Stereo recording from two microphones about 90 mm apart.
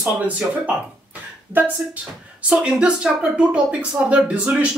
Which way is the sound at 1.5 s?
20° right (ahead or behind).